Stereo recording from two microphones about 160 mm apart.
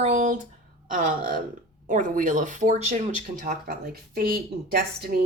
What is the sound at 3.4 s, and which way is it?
A woman's voice, 65° right (ahead or behind).